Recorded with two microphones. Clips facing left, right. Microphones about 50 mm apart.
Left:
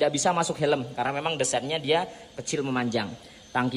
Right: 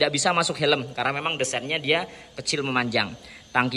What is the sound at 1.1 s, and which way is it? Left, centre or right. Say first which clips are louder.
Speech: even; right.